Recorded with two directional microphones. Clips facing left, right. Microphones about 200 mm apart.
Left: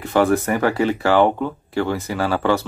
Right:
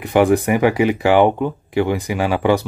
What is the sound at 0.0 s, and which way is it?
Speech, 15° right (ahead or behind).